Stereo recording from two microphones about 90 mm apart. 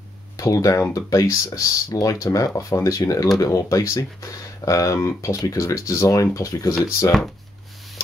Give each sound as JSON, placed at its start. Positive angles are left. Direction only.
{"t": 0.4, "sound": "speech", "side_deg": 40}